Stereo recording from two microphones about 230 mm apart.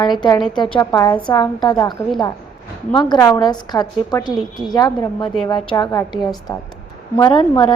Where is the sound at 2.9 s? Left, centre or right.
Centre.